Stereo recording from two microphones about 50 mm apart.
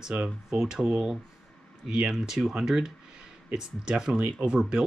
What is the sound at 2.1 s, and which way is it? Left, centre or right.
Speech, centre.